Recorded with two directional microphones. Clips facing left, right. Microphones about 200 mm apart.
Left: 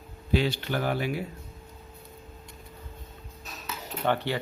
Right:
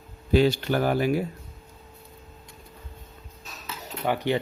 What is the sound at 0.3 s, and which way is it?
Speech, 45° right (ahead or behind).